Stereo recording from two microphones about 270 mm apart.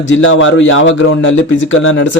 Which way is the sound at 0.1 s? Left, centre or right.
Left.